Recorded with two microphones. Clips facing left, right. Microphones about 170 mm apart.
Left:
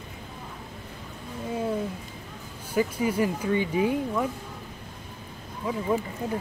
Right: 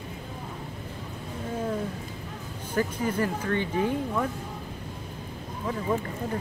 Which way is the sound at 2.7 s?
10° left (ahead or behind).